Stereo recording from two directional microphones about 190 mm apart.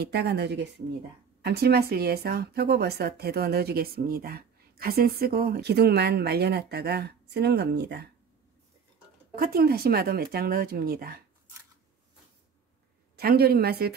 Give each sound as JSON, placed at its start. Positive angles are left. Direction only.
{"t": 0.0, "sound": "speech", "side_deg": -60}
{"t": 9.3, "sound": "speech", "side_deg": -55}
{"t": 13.1, "sound": "speech", "side_deg": -55}